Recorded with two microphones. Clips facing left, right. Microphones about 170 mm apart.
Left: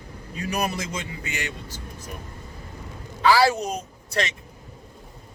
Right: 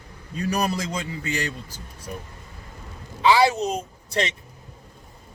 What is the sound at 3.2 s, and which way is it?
A woman's voice, 20° right (ahead or behind).